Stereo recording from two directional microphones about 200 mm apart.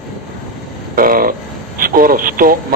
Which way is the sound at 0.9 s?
45° right (ahead or behind).